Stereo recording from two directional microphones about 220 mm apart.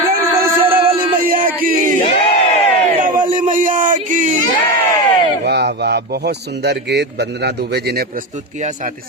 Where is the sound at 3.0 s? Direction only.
35° right (ahead or behind).